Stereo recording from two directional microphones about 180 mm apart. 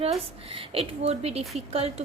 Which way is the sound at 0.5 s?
30° right (ahead or behind).